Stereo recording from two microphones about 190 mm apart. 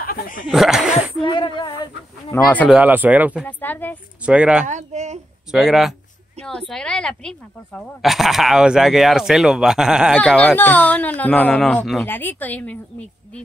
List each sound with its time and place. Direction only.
0.0 s snicker: 45° left (ahead or behind)
0.5 s speech: centre (ahead or behind)
1.2 s speech: 25° left (ahead or behind)
2.3 s speech: 10° left (ahead or behind)
2.7 s speech: 10° right (ahead or behind)
3.4 s speech: 10° left (ahead or behind)
4.3 s speech: 5° right (ahead or behind)
4.6 s a child's voice: 40° right (ahead or behind)
5.5 s speech: 5° right (ahead or behind)
10.1 s speech: 5° left (ahead or behind)